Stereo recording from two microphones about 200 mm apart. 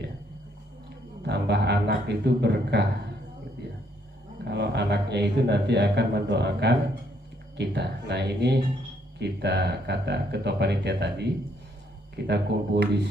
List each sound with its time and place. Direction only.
1.2 s speech: 55° right (ahead or behind)
4.5 s speech: 60° right (ahead or behind)
12.3 s speech: 55° right (ahead or behind)